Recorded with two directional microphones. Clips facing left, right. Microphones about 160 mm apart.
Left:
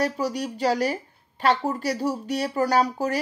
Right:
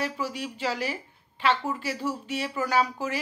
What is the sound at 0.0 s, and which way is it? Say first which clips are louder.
Speech: left 6 dB; 40° left (ahead or behind).